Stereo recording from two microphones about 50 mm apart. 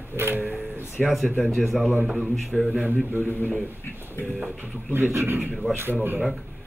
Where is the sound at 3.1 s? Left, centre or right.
Right.